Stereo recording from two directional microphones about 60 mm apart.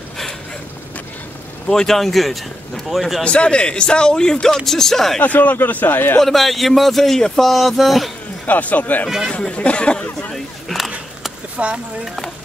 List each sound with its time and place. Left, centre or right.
1.7 s speech: centre
3.3 s a man's voice: centre
5.2 s a man's voice: left
6.1 s speech: centre
8.5 s speech: left
10.3 s a sound: centre
11.5 s speech: right